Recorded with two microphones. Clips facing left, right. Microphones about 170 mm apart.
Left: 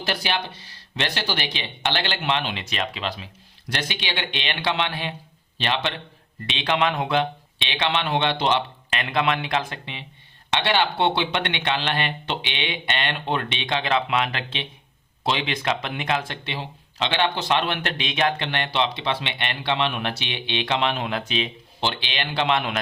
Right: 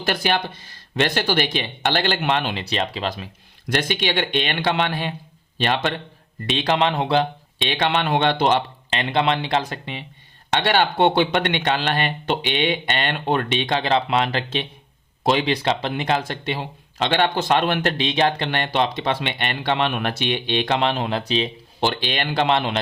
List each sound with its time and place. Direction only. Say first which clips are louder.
0.0 s speech: right 4 dB; 50° right (ahead or behind)
8.9 s speech: right 3 dB; 30° right (ahead or behind)
21.8 s speech: right 5 dB; 45° right (ahead or behind); by 22.8 s 30° right (ahead or behind)